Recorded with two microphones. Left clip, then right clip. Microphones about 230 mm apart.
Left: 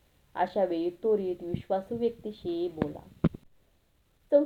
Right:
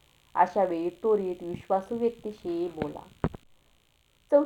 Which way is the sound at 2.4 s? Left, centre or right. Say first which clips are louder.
Right 1 dB; right.